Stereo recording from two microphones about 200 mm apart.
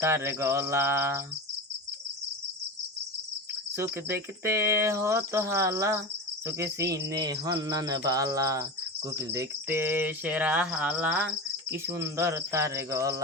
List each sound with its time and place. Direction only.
0.0 s cricket: 15° right (ahead or behind)
3.8 s cricket: 15° right (ahead or behind)